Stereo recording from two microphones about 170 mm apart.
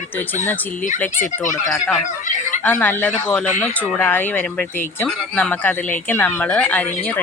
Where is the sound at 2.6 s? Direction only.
10° left (ahead or behind).